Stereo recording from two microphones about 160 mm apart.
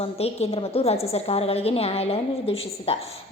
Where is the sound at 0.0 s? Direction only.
40° left (ahead or behind).